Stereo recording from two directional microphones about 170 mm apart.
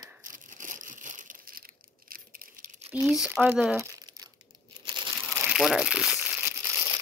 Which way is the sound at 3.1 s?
5° right (ahead or behind).